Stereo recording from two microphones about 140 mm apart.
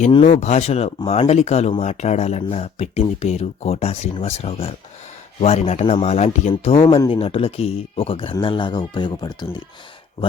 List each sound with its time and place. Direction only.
0.3 s speech: 55° left (ahead or behind); by 9.6 s 30° left (ahead or behind)